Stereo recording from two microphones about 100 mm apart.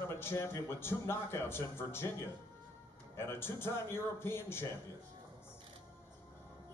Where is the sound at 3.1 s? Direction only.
25° left (ahead or behind).